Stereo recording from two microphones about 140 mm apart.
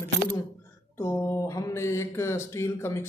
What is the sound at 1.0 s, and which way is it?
Speech, 20° left (ahead or behind).